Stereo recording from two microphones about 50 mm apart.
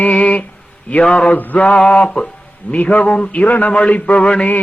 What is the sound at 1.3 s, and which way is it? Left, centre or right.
Music, left.